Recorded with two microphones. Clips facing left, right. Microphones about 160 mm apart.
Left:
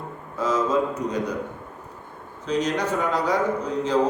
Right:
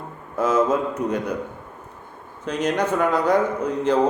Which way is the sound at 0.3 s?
55° right (ahead or behind).